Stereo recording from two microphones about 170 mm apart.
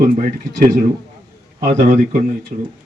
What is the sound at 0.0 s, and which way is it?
Speech, 55° right (ahead or behind).